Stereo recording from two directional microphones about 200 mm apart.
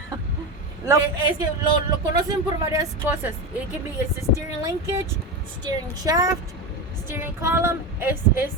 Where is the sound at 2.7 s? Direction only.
10° right (ahead or behind).